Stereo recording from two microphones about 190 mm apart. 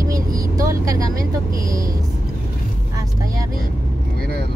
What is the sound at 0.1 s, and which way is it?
Vehicle, 20° right (ahead or behind).